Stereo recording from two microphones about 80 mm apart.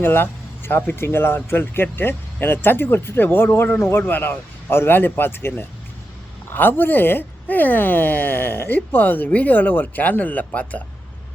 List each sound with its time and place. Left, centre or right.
0.0 s speech: left